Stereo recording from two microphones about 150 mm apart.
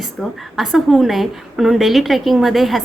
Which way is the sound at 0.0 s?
Centre (ahead or behind).